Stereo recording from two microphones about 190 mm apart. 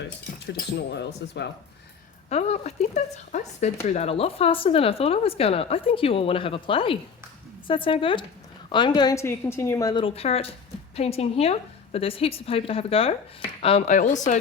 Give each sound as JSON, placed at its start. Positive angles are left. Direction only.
{"t": 0.4, "sound": "speech", "side_deg": 60}
{"t": 2.3, "sound": "a woman's voice", "side_deg": 35}